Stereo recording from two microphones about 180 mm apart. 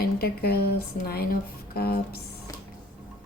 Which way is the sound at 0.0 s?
60° left (ahead or behind).